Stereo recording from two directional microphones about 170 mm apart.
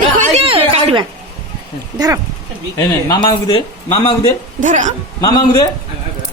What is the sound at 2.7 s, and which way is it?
Speech, 25° left (ahead or behind).